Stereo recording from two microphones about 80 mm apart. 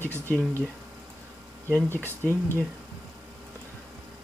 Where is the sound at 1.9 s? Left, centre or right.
Left.